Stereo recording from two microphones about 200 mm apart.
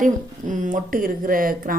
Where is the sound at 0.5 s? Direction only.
40° right (ahead or behind).